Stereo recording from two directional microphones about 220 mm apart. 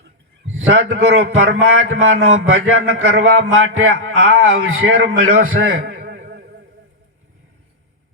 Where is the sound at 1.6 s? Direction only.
65° right (ahead or behind).